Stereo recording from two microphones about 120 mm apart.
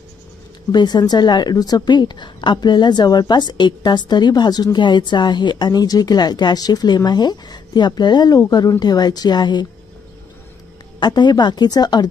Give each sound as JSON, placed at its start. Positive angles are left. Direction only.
{"t": 0.7, "sound": "a woman's voice", "side_deg": 35}
{"t": 11.0, "sound": "a woman's voice", "side_deg": 40}